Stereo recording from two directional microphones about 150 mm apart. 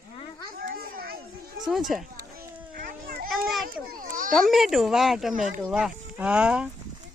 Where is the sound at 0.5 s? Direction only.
80° right.